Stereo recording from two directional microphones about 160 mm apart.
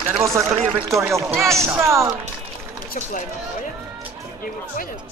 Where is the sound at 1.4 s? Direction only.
20° right (ahead or behind).